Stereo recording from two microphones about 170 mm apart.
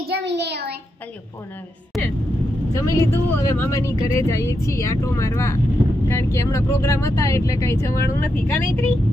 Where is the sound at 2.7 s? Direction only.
15° left (ahead or behind).